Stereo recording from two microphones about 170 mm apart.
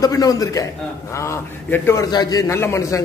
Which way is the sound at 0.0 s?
20° left (ahead or behind).